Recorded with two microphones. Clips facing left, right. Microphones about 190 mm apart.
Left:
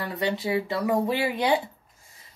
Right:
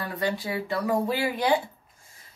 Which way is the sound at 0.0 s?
20° left (ahead or behind).